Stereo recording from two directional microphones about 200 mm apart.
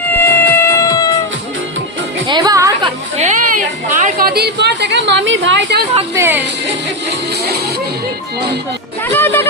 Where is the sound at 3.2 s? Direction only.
40° right (ahead or behind); by 5.8 s 60° right (ahead or behind).